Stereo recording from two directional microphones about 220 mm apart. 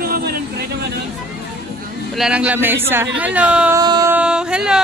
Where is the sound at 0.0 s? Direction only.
45° right (ahead or behind).